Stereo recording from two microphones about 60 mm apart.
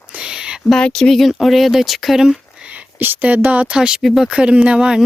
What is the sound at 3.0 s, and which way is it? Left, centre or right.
Speech, right.